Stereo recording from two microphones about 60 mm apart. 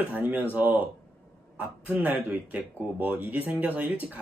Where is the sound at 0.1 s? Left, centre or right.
Right.